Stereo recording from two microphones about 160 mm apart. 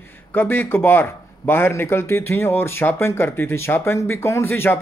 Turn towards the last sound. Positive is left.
turn(degrees=15)  # may be behind; listen again after turning